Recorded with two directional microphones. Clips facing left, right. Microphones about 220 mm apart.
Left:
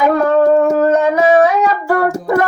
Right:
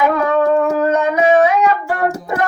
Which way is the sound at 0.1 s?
40° left (ahead or behind).